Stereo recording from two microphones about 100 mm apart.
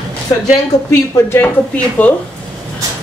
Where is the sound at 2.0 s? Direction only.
15° left (ahead or behind).